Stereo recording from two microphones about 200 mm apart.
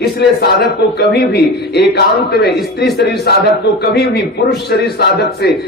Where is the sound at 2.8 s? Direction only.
55° left (ahead or behind).